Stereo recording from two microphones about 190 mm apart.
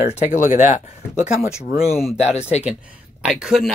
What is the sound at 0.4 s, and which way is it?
Speech, 45° left (ahead or behind).